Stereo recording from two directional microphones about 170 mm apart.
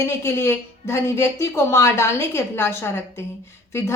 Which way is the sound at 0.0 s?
15° left (ahead or behind).